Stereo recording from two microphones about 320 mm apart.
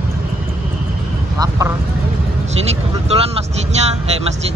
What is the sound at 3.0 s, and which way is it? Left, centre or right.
Speech, centre.